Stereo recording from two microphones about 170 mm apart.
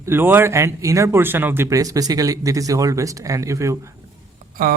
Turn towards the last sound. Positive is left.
turn(degrees=-55)  # may be behind; listen again after turning